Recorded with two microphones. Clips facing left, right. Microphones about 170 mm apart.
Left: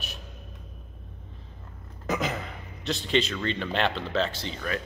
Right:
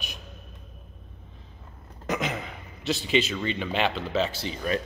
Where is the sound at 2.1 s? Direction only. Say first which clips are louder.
Even; centre (ahead or behind).